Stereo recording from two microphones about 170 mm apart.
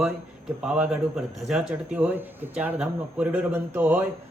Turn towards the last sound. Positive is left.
turn(degrees=-10)  # may be behind; listen again after turning